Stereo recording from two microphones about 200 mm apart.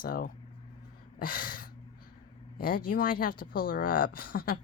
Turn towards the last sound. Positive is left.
turn(degrees=45)  # may be behind; listen again after turning